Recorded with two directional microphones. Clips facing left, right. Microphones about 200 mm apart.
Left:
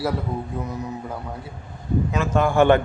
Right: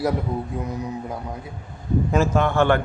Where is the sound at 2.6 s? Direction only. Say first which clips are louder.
Left 4 dB; 20° left (ahead or behind).